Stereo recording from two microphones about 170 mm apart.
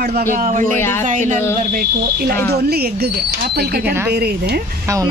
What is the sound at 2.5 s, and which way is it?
Speech, 65° right (ahead or behind).